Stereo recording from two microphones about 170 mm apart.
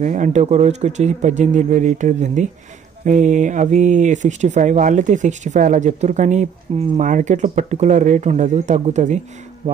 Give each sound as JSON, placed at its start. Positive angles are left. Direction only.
{"t": 0.0, "sound": "speech", "side_deg": -45}